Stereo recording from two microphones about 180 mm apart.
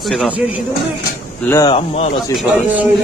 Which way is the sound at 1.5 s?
20° left (ahead or behind).